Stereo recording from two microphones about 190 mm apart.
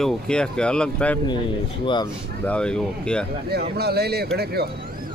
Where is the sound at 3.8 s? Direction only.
55° right (ahead or behind).